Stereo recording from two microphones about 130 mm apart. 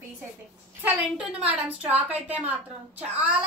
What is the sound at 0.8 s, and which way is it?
A woman's voice, 10° right (ahead or behind).